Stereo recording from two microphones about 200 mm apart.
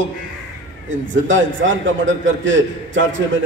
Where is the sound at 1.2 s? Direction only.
70° right (ahead or behind).